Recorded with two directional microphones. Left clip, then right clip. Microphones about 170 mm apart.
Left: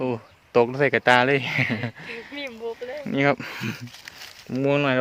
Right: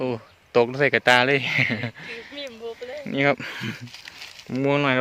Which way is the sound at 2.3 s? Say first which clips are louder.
Left 4 dB; 40° left (ahead or behind).